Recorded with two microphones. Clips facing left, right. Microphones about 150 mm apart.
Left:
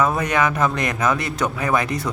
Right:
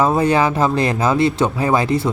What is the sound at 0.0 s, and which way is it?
Speech, 30° right (ahead or behind).